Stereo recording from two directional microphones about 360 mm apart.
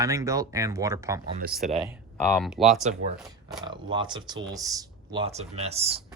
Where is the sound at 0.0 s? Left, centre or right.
Centre.